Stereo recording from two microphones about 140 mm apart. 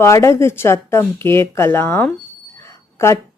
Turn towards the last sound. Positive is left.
turn(degrees=20)  # may be behind; listen again after turning